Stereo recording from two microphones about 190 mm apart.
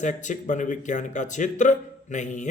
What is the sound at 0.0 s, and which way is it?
Speech, 40° left (ahead or behind).